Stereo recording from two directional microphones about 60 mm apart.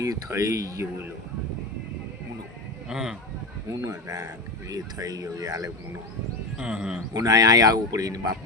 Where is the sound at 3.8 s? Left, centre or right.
Right.